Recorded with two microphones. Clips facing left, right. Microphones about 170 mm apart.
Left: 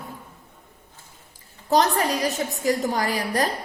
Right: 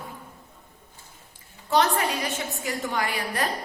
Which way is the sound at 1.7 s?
40° left (ahead or behind).